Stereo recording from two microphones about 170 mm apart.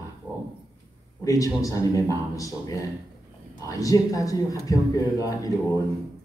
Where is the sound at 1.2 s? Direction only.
20° left (ahead or behind).